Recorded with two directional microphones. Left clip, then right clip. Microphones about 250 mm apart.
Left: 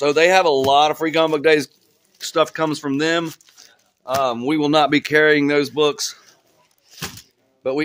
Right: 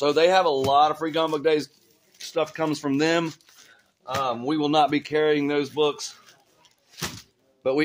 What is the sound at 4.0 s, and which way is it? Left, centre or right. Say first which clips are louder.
Speech: left 6 dB; left.